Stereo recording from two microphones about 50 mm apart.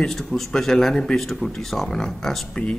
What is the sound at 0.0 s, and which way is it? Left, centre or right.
Speech, centre.